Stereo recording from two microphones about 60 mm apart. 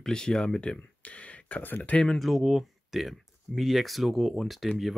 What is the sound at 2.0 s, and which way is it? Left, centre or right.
Speech, centre.